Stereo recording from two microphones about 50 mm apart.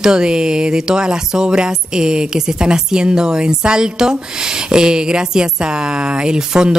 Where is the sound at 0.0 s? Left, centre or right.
Centre.